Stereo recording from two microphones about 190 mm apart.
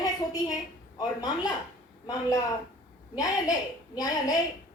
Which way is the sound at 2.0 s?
20° left (ahead or behind).